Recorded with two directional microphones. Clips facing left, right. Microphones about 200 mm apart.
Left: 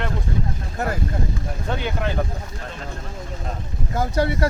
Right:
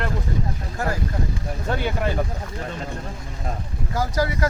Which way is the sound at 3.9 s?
25° left (ahead or behind).